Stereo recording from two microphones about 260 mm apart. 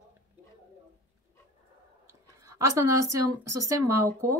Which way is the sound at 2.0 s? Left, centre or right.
Centre.